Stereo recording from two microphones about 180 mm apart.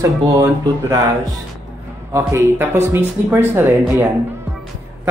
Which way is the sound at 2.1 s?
15° right (ahead or behind).